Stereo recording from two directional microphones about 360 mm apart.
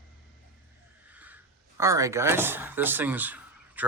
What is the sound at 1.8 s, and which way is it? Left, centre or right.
Speech, centre.